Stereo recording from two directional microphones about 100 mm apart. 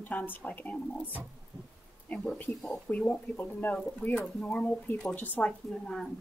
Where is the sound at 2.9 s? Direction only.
15° left (ahead or behind).